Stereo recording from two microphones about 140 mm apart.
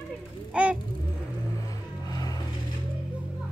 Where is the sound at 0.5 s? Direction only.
10° right (ahead or behind).